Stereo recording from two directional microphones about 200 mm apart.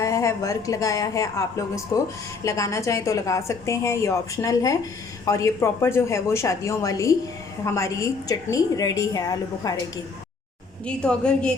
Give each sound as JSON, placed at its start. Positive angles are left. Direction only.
{"t": 0.0, "sound": "a woman's voice", "side_deg": 15}
{"t": 10.8, "sound": "a woman's voice", "side_deg": 5}